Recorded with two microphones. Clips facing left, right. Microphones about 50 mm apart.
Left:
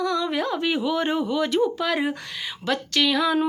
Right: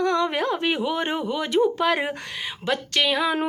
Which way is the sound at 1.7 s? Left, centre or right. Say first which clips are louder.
Right 2 dB; right.